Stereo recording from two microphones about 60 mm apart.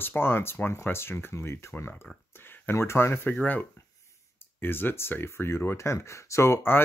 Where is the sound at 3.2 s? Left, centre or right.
Left.